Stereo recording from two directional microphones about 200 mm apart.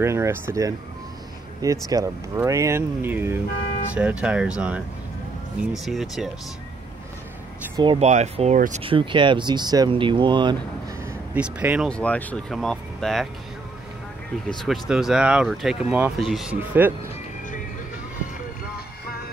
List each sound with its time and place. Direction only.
0.0 s speech: 15° right (ahead or behind)
1.9 s speech: 15° right (ahead or behind); by 6.3 s centre (ahead or behind)
7.7 s speech: 25° right (ahead or behind)
8.8 s speech: 25° right (ahead or behind)
11.3 s speech: 5° right (ahead or behind)
11.9 s speech: 5° left (ahead or behind)
14.5 s speech: centre (ahead or behind)